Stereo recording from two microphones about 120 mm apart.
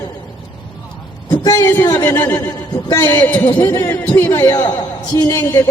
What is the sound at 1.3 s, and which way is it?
Speech, 30° left (ahead or behind).